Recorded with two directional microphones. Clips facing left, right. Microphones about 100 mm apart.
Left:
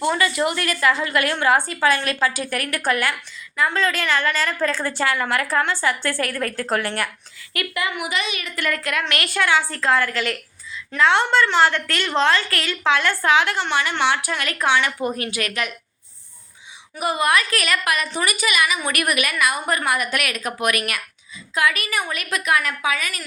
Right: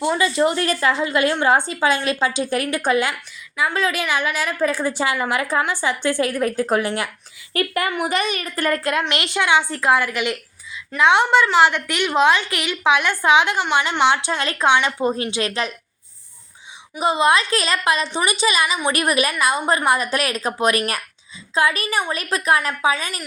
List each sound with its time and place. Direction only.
0.0 s a woman's voice: 20° right (ahead or behind)
3.6 s a woman's voice: 10° right (ahead or behind)
7.5 s a woman's voice: 40° right (ahead or behind)
17.0 s a woman's voice: 25° right (ahead or behind)